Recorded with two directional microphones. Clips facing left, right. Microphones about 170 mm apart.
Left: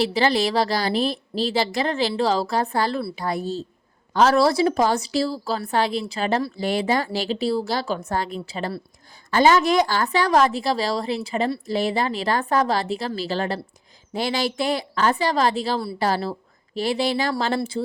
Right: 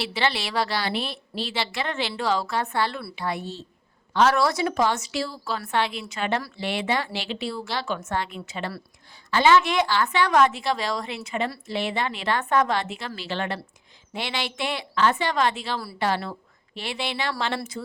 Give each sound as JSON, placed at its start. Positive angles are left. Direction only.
{"t": 0.0, "sound": "a woman's voice", "side_deg": 40}